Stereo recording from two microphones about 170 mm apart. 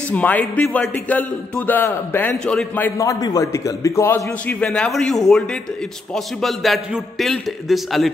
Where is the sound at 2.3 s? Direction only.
Centre (ahead or behind).